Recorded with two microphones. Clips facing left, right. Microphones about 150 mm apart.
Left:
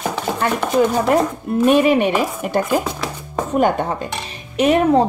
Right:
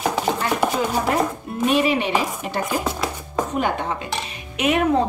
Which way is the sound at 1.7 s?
50° left (ahead or behind).